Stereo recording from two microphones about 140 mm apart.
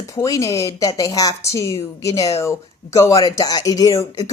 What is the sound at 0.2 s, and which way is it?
A woman's voice, 25° left (ahead or behind).